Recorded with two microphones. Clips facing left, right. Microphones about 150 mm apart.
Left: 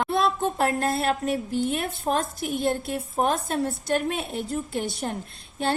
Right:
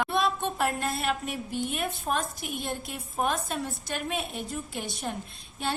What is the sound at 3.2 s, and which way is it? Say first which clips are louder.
A woman's voice: left 4 dB; 50° left (ahead or behind).